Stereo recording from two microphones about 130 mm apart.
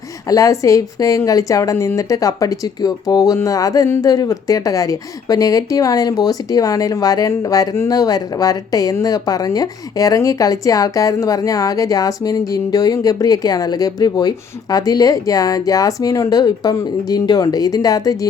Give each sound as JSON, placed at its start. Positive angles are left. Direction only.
{"t": 0.3, "sound": "a woman's voice", "side_deg": 25}